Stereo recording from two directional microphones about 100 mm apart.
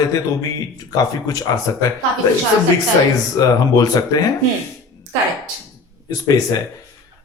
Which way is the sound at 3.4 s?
35° left (ahead or behind).